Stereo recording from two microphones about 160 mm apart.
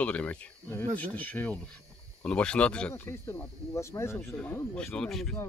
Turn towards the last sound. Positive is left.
turn(degrees=5)  # may be behind; listen again after turning